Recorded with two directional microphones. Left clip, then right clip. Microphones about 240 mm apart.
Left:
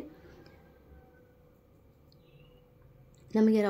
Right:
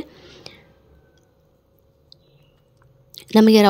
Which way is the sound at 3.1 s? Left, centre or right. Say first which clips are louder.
Right 13 dB; right.